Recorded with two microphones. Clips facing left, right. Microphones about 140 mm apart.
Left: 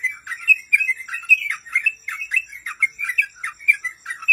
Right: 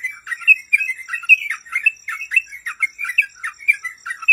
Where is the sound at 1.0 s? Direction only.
50° left (ahead or behind).